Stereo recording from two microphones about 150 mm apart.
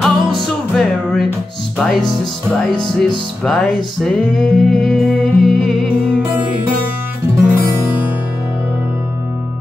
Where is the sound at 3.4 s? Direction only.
5° left (ahead or behind).